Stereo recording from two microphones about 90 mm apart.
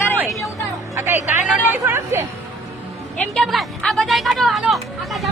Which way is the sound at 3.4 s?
Centre (ahead or behind).